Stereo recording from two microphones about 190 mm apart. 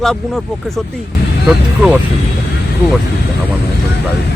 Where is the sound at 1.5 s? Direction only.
5° right (ahead or behind).